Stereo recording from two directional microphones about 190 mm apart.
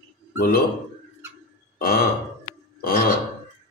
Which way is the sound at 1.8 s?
55° left (ahead or behind).